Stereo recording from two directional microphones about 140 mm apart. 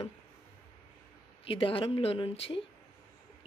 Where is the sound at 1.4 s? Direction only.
40° left (ahead or behind).